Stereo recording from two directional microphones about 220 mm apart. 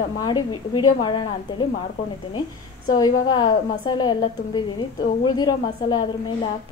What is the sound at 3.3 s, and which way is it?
A woman's voice, 20° left (ahead or behind).